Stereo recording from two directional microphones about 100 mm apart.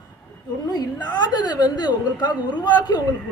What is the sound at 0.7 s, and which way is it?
A woman's voice, 45° left (ahead or behind).